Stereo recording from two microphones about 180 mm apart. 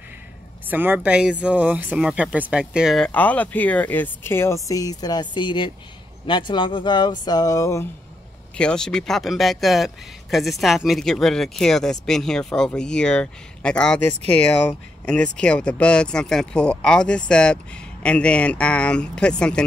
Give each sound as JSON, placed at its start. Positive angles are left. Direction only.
{"t": 0.7, "sound": "speech", "side_deg": -10}
{"t": 8.5, "sound": "speech", "side_deg": 5}